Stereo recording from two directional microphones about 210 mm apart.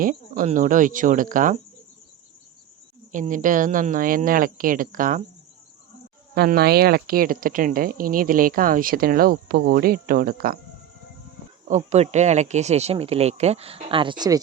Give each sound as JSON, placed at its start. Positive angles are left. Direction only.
{"t": 0.0, "sound": "speech", "side_deg": -40}
{"t": 3.1, "sound": "speech", "side_deg": -40}
{"t": 6.3, "sound": "speech", "side_deg": -45}
{"t": 11.7, "sound": "speech", "side_deg": -30}